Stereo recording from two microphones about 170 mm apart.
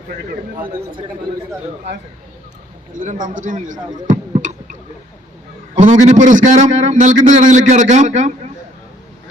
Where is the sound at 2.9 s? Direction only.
50° right (ahead or behind).